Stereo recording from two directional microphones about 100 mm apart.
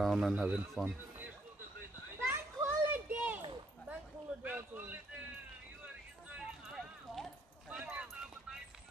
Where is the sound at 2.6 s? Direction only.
20° right (ahead or behind).